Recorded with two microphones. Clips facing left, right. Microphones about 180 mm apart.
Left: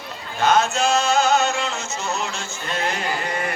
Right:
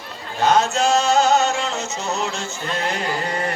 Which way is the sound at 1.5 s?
25° right (ahead or behind).